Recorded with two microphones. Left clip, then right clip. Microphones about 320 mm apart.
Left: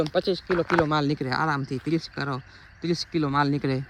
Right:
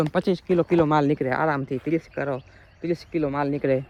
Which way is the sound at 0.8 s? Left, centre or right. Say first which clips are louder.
Right 4 dB; centre.